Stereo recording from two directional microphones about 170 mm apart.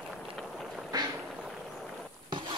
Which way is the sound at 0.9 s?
20° right (ahead or behind).